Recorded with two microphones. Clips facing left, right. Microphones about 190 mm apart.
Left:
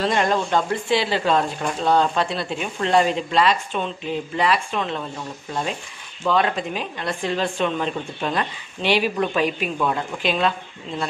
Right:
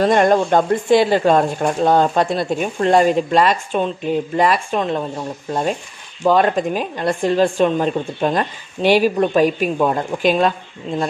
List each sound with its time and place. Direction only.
0.0 s speech: 50° right (ahead or behind)